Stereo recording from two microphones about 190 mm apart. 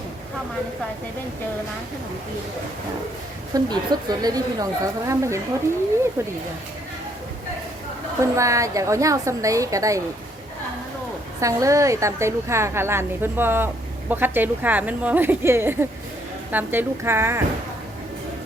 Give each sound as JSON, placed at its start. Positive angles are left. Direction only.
{"t": 3.5, "sound": "a woman's voice", "side_deg": -20}
{"t": 8.2, "sound": "a woman's voice", "side_deg": -15}
{"t": 11.3, "sound": "a woman's voice", "side_deg": -15}